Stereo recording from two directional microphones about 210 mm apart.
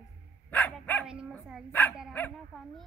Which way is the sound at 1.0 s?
5° right (ahead or behind).